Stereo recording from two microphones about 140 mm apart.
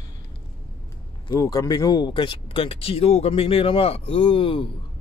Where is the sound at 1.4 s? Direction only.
25° left (ahead or behind).